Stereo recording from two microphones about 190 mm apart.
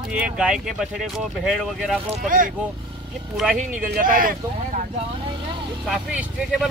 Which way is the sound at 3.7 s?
45° right (ahead or behind).